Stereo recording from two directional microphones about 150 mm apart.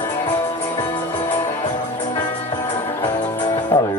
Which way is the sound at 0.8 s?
30° left (ahead or behind).